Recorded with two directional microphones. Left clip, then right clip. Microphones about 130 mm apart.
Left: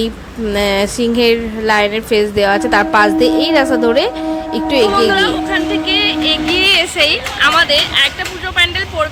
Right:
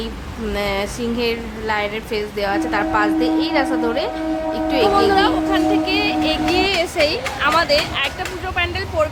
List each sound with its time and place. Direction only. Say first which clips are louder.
0.5 s a woman's voice: left 8 dB; 40° left (ahead or behind)
5.1 s speech: left 2 dB; centre (ahead or behind)